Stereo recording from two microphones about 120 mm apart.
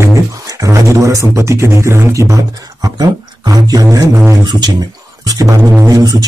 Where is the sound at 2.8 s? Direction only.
35° right (ahead or behind).